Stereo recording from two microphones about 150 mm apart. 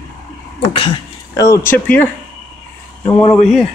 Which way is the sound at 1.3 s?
20° left (ahead or behind).